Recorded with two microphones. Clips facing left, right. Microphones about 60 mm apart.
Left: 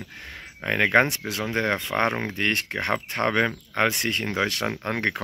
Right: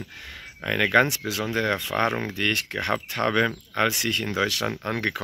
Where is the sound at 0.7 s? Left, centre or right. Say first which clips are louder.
Even; left.